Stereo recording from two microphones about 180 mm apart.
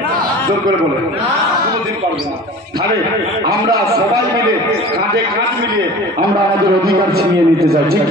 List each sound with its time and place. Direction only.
6.9 s a man's voice: 60° right (ahead or behind)